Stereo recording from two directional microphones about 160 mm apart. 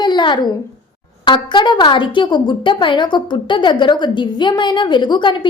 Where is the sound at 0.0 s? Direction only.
30° left (ahead or behind).